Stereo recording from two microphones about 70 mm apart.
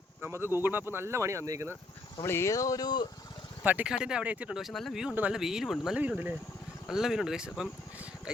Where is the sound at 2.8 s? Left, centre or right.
Left.